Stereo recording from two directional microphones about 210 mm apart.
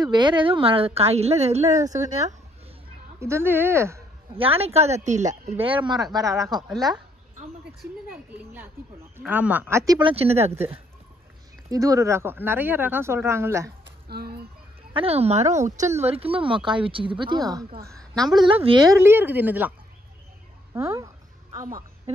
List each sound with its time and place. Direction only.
0.0 s speech: 20° right (ahead or behind)
3.2 s speech: 10° right (ahead or behind)
4.4 s speech: 30° right (ahead or behind)
5.3 s speech: 25° right (ahead or behind)
7.8 s speech: 10° right (ahead or behind)
10.0 s speech: 30° right (ahead or behind)
11.7 s speech: 15° right (ahead or behind)
13.8 s a sound: 50° right (ahead or behind)
15.0 s speech: 30° right (ahead or behind)
17.9 s a sound: centre (ahead or behind)
18.3 s speech: 25° right (ahead or behind)
20.7 s a sound: 15° right (ahead or behind)
21.6 s speech: 40° right (ahead or behind)